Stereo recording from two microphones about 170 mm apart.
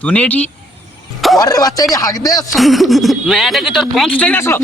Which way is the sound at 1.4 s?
20° left (ahead or behind).